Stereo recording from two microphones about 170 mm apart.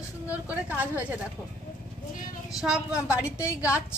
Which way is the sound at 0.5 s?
10° right (ahead or behind).